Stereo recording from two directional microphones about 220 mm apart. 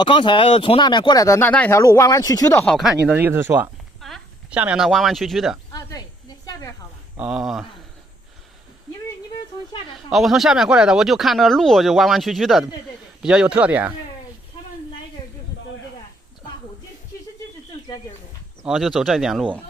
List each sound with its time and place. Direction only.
0.0 s speech: 20° left (ahead or behind)
2.6 s speech: centre (ahead or behind)
5.7 s snake: 15° left (ahead or behind)
7.2 s speech: 5° right (ahead or behind)
10.1 s speech: centre (ahead or behind)
18.6 s speech: centre (ahead or behind)